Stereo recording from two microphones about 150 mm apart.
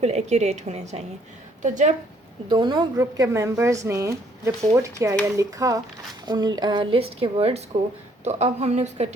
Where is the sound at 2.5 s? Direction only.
30° right (ahead or behind).